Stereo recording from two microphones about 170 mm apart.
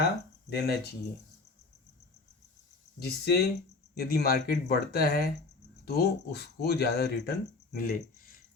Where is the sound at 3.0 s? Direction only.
70° left (ahead or behind).